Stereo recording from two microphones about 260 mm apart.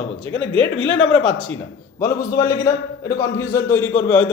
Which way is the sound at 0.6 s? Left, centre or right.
Left.